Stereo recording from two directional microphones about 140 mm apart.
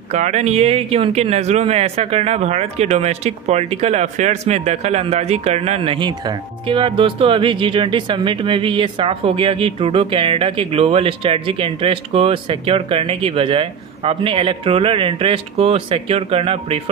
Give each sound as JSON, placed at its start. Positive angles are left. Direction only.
{"t": 0.1, "sound": "speech", "side_deg": -55}